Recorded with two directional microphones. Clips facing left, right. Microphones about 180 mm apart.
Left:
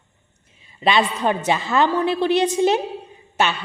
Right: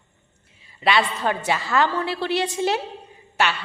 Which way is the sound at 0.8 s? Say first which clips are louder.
Left 2 dB; 20° left (ahead or behind).